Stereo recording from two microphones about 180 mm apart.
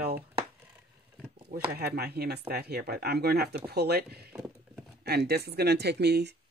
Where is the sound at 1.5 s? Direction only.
60° right (ahead or behind).